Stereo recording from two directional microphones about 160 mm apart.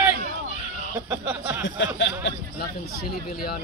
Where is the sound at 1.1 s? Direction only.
10° right (ahead or behind).